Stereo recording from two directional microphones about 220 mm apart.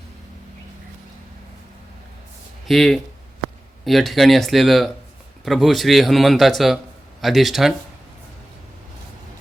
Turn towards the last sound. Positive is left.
turn(degrees=0)  # may be behind; listen again after turning